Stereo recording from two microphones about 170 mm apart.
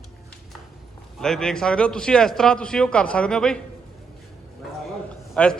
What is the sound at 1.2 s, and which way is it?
A man's voice, 5° left (ahead or behind).